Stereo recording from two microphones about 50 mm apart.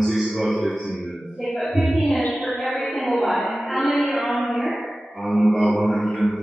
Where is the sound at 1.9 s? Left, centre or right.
Centre.